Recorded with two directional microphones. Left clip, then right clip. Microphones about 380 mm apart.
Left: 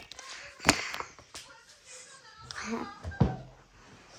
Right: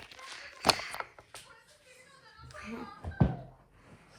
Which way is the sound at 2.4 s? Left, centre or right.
Left.